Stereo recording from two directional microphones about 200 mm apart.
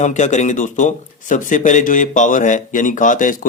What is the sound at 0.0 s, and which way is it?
A man's voice, 35° left (ahead or behind).